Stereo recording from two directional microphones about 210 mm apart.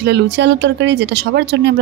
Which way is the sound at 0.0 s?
55° right (ahead or behind).